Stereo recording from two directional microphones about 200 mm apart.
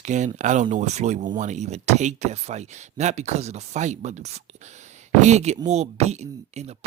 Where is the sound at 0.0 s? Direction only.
35° right (ahead or behind).